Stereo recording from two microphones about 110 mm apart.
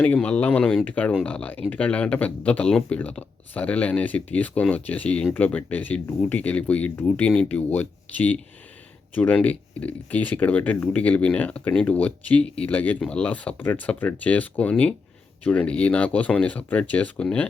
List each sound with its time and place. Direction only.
0.0 s speech: 10° left (ahead or behind)